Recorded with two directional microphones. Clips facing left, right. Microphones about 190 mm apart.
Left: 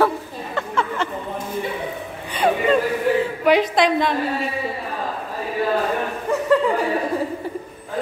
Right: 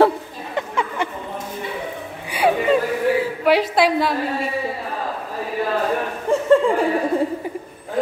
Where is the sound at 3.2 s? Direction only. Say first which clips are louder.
Even; 5° right (ahead or behind).